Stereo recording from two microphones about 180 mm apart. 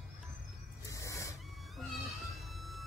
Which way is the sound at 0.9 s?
15° left (ahead or behind).